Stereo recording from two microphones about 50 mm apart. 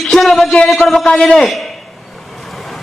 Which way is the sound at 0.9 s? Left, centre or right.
Centre.